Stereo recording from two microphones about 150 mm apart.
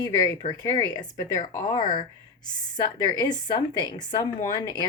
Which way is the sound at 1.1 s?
55° left (ahead or behind).